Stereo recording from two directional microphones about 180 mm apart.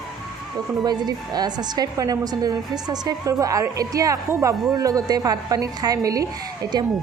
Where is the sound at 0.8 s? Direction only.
20° right (ahead or behind).